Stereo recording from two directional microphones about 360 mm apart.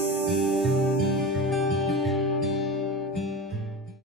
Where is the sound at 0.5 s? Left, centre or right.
Centre.